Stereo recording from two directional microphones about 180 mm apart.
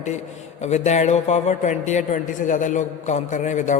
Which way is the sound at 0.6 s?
40° left (ahead or behind).